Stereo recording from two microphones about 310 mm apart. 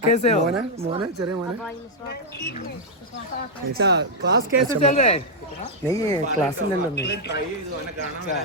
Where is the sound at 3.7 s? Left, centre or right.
Right.